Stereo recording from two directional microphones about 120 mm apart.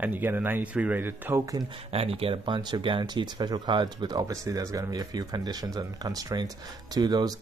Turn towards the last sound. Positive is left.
turn(degrees=-35)  # may be behind; listen again after turning